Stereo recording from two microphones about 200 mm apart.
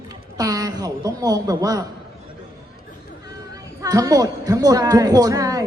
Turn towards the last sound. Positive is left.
turn(degrees=-15)  # may be behind; listen again after turning